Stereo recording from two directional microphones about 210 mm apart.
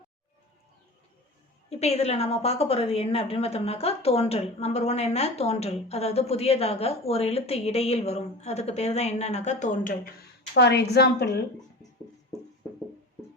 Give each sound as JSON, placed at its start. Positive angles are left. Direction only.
{"t": 1.7, "sound": "a woman's voice", "side_deg": 30}
{"t": 10.5, "sound": "a woman's voice", "side_deg": 50}